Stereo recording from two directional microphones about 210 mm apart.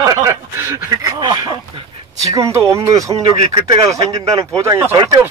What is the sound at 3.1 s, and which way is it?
Speech, 30° right (ahead or behind).